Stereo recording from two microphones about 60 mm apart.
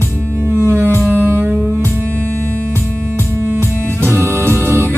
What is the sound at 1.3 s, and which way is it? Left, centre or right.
Music, right.